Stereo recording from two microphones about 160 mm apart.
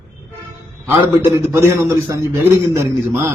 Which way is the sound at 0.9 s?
15° right (ahead or behind).